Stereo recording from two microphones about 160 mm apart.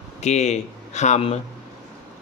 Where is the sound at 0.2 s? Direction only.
45° left (ahead or behind).